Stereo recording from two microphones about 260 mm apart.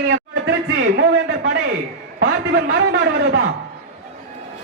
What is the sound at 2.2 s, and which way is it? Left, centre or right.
A man's voice, right.